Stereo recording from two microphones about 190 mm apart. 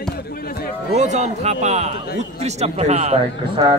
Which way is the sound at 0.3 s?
50° left (ahead or behind).